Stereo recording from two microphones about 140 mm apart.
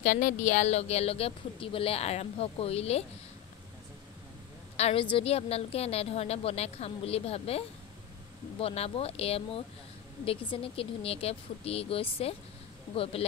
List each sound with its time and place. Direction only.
0.0 s speech: 70° left (ahead or behind); by 3.1 s 45° left (ahead or behind)
4.7 s a woman's voice: 50° left (ahead or behind)
10.5 s speech: 40° left (ahead or behind)